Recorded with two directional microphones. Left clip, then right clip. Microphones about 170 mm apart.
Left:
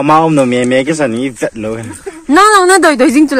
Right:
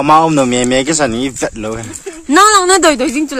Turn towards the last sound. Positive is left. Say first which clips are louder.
# left 7 dB
turn(degrees=15)  # may be behind; listen again after turning